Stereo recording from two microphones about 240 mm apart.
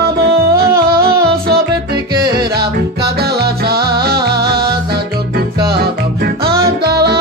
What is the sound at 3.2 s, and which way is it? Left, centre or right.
Music, right.